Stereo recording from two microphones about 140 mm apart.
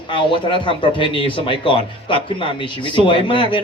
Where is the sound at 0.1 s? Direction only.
35° left (ahead or behind).